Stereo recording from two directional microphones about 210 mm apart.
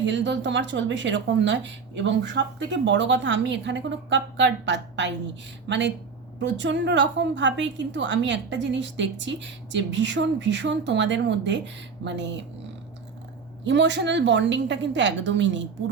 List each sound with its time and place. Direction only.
0.0 s a woman's voice: 60° right (ahead or behind)
13.7 s a woman's voice: 60° right (ahead or behind)